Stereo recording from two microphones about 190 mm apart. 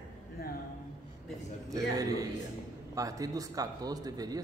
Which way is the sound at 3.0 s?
20° right (ahead or behind).